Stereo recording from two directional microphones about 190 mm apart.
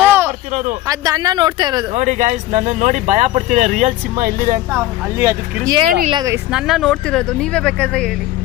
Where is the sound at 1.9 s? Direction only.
40° right (ahead or behind).